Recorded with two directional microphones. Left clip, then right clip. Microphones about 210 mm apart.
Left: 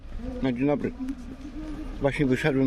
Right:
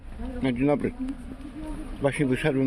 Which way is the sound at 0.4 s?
Centre (ahead or behind).